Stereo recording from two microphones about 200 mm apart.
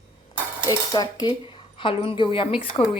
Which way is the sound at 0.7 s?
20° left (ahead or behind).